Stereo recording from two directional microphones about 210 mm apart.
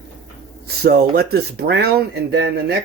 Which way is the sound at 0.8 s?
45° right (ahead or behind).